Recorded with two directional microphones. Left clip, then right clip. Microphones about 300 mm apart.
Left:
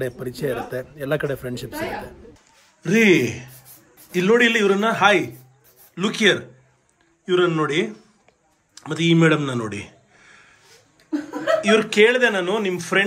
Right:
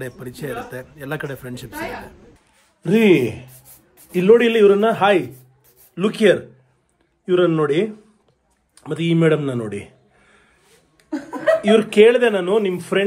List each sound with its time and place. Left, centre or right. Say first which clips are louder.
0.0 s a man's voice: left 5 dB; centre
11.6 s speech: right 3 dB; centre